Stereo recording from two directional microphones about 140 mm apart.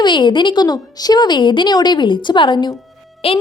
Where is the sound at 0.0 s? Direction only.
35° left (ahead or behind).